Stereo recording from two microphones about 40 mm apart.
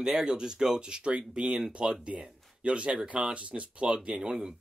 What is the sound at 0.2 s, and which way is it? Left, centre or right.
Speech, centre.